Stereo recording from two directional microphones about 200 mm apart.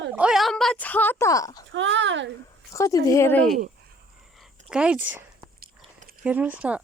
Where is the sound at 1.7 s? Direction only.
65° right (ahead or behind).